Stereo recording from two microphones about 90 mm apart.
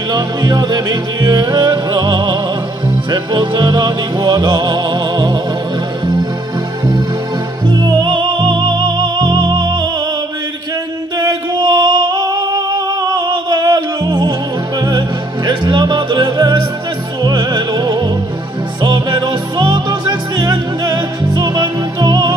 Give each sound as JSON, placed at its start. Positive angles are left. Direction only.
{"t": 0.1, "sound": "music", "side_deg": -50}
{"t": 7.6, "sound": "music", "side_deg": -55}
{"t": 11.1, "sound": "singing", "side_deg": -50}
{"t": 14.9, "sound": "music", "side_deg": -55}